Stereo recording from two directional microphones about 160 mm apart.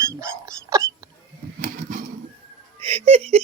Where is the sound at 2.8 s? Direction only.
35° right (ahead or behind).